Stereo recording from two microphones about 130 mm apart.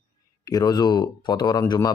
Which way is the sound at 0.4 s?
30° left (ahead or behind).